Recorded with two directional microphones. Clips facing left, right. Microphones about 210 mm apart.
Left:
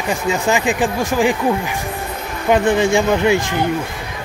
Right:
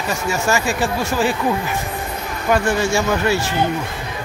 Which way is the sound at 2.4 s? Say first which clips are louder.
Left 4 dB; 20° left (ahead or behind).